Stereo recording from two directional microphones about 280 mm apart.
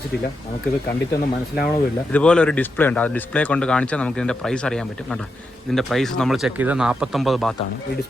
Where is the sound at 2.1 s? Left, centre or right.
Centre.